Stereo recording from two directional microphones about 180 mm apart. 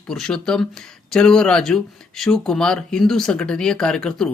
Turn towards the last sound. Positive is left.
turn(degrees=5)  # may be behind; listen again after turning